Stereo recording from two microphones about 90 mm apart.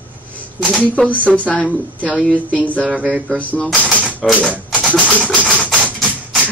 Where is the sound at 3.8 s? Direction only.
15° left (ahead or behind).